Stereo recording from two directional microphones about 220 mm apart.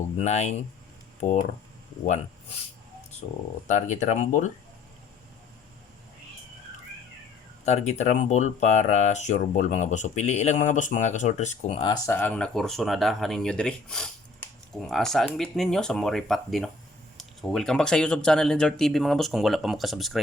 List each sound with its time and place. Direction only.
0.2 s speech: 30° left (ahead or behind)
3.7 s speech: 30° left (ahead or behind)
7.6 s speech: 30° left (ahead or behind); by 20.1 s centre (ahead or behind)